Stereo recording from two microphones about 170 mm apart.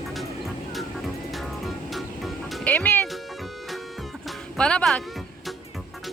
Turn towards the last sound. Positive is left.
turn(degrees=5)  # may be behind; listen again after turning